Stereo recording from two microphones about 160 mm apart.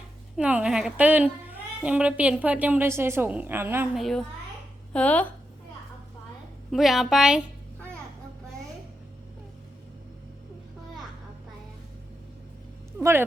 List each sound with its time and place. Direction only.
0.3 s a woman's voice: 5° right (ahead or behind)
3.9 s a woman's voice: centre (ahead or behind)
6.7 s a woman's voice: centre (ahead or behind)
13.0 s speech: 15° right (ahead or behind)